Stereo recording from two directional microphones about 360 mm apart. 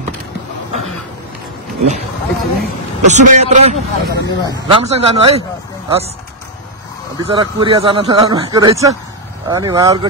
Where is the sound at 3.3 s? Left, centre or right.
Centre.